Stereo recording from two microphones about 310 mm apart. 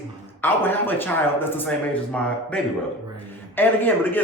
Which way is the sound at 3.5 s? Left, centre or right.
Centre.